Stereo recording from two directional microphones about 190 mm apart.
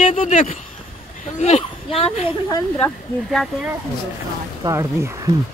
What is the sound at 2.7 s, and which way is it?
Speech, 5° left (ahead or behind).